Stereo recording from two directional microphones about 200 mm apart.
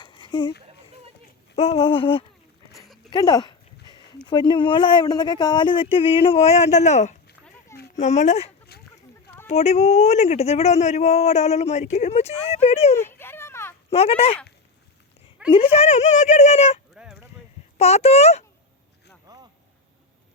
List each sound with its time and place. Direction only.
0.0 s a sound: 20° left (ahead or behind)
1.5 s speech: 30° left (ahead or behind)
2.7 s dog: centre (ahead or behind)
3.1 s speech: 20° left (ahead or behind)
13.0 s a sound: 10° left (ahead or behind)
13.9 s speech: 30° left (ahead or behind)
15.4 s speech: 25° left (ahead or behind)
16.9 s honk: 5° right (ahead or behind)
17.7 s speech: 30° left (ahead or behind)